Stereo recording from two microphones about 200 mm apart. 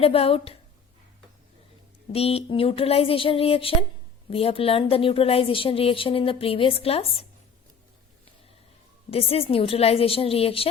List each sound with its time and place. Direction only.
0.0 s a woman's voice: 30° left (ahead or behind)
2.1 s a woman's voice: 30° left (ahead or behind)
9.0 s a woman's voice: 30° left (ahead or behind)